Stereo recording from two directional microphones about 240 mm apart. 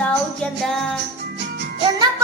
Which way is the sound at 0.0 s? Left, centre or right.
Centre.